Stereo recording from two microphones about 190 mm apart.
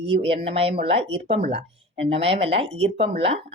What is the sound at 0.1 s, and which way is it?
Speech, 30° right (ahead or behind).